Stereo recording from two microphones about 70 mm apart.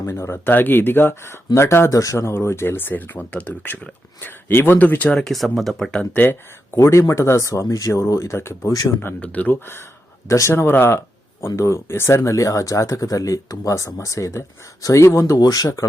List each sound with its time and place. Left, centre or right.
0.0 s speech: left
1.9 s speech: left
5.1 s speech: centre
6.7 s speech: left
8.6 s speech: left
9.2 s speech: left
10.2 s speech: left
10.5 s speech: left
15.4 s speech: left